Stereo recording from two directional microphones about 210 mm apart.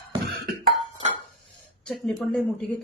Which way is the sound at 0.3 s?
45° right (ahead or behind).